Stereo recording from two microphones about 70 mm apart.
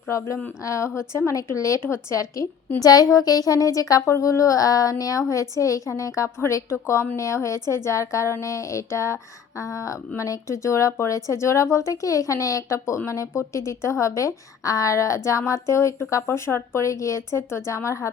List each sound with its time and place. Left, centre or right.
0.1 s a woman's voice: left
1.8 s a woman's voice: left
2.8 s a woman's voice: left